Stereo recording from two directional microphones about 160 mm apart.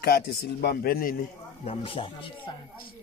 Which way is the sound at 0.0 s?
80° left.